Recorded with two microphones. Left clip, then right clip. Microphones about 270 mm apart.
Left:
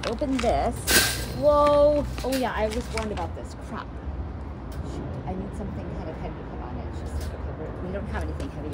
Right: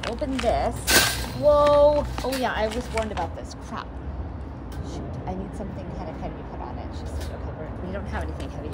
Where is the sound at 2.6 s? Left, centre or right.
Centre.